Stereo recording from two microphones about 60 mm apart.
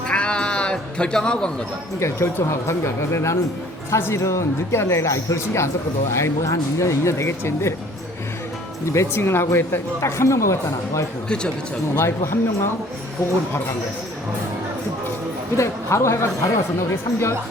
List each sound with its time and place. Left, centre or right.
0.1 s cat: centre
2.0 s speech: left
8.9 s speech: left
15.5 s speech: left